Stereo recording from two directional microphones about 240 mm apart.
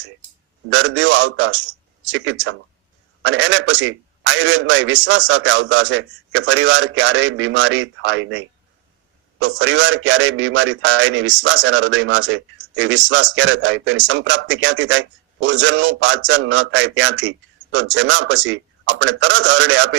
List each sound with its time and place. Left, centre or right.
0.7 s a man's voice: right